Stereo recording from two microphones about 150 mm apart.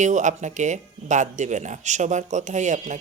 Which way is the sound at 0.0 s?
55° right (ahead or behind).